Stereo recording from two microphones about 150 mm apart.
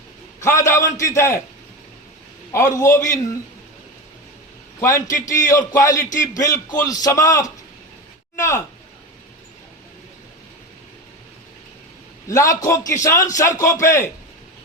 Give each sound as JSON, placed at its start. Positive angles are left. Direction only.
{"t": 0.3, "sound": "a man's voice", "side_deg": 20}
{"t": 2.5, "sound": "a man's voice", "side_deg": 20}
{"t": 4.8, "sound": "a man's voice", "side_deg": 20}
{"t": 12.3, "sound": "a man's voice", "side_deg": 20}